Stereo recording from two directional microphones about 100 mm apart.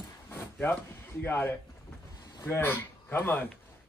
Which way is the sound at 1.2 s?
20° left (ahead or behind).